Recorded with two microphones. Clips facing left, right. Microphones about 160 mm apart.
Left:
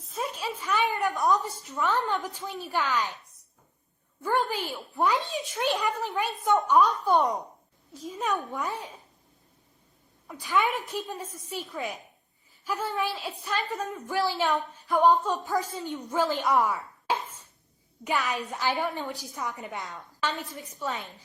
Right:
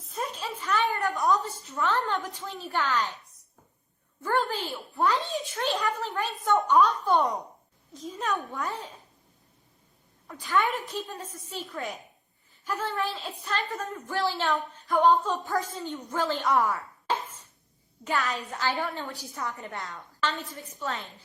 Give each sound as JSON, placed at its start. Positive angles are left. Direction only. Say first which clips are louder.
{"t": 0.0, "sound": "a sound", "louder": "left 1 dB", "side_deg": 5}
{"t": 2.0, "sound": "a woman's voice", "louder": "left 1 dB", "side_deg": 10}
{"t": 4.2, "sound": "a woman's voice", "louder": "even", "side_deg": 10}
{"t": 10.2, "sound": "a woman's voice", "louder": "even", "side_deg": 10}
{"t": 17.1, "sound": "ping", "louder": "even", "side_deg": 10}
{"t": 18.0, "sound": "a woman's voice", "louder": "left 1 dB", "side_deg": 15}